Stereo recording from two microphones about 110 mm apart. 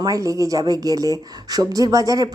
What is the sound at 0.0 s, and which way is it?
Speech, 30° right (ahead or behind).